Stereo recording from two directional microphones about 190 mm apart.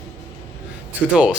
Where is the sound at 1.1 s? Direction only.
5° right (ahead or behind).